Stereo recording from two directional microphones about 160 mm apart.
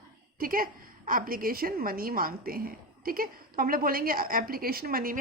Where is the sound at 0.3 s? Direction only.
65° right (ahead or behind).